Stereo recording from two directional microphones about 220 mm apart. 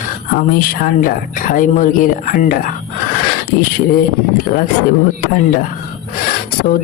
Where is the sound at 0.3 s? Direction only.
40° left (ahead or behind).